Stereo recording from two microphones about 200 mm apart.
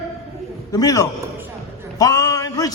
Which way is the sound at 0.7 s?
20° left (ahead or behind).